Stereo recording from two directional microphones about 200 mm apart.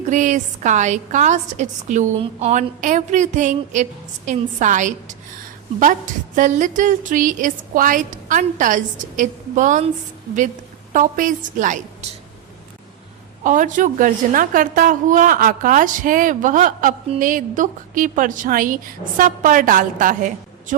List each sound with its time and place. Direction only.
0.0 s a woman's voice: 40° right (ahead or behind)
10.9 s a woman's voice: 40° right (ahead or behind)
13.4 s a woman's voice: 40° right (ahead or behind)